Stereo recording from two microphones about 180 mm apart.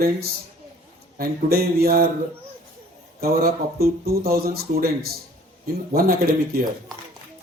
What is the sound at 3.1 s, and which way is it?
Speech, 55° right (ahead or behind).